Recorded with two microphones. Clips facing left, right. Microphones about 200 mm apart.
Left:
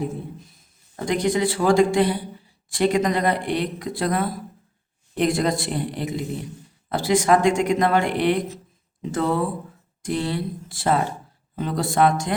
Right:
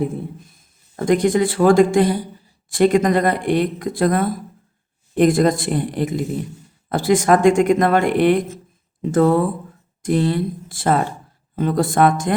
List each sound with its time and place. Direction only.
0.4 s speech: 50° right (ahead or behind)